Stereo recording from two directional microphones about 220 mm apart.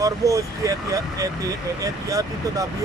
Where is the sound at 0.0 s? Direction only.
15° right (ahead or behind).